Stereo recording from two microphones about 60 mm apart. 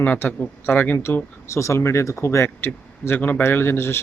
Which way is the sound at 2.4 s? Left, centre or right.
Left.